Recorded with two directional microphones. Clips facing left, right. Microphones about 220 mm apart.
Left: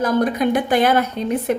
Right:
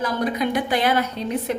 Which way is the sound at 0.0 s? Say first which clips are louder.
Left 5 dB; 50° left (ahead or behind).